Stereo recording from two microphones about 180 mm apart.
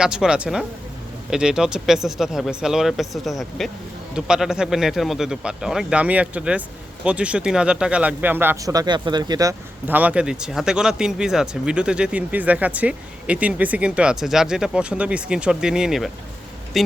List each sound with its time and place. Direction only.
0.0 s speech: 5° right (ahead or behind)